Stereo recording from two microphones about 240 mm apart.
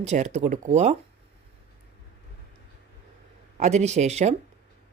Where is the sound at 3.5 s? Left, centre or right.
Right.